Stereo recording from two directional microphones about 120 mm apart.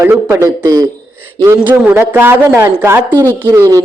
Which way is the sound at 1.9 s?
20° right (ahead or behind).